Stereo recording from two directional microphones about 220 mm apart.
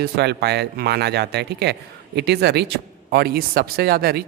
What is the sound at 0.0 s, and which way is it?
Speech, 50° right (ahead or behind).